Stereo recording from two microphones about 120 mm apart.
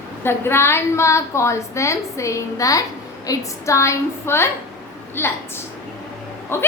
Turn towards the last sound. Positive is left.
turn(degrees=20)  # may be behind; listen again after turning